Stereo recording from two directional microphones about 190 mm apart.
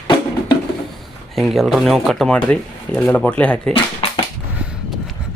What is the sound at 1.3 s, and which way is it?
Speech, centre (ahead or behind).